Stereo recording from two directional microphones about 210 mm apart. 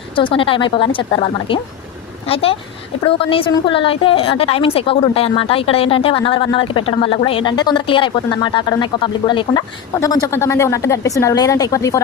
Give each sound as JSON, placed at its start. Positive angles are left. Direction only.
{"t": 0.2, "sound": "a woman's voice", "side_deg": 25}